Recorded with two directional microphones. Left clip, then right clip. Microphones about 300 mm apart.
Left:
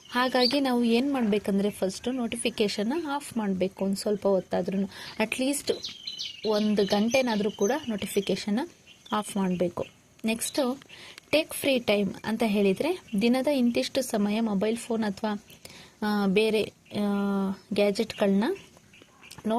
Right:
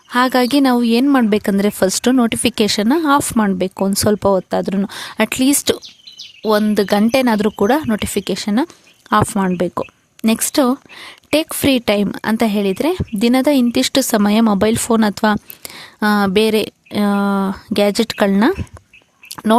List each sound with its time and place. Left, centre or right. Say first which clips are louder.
0.1 s a woman's voice: right 10 dB; right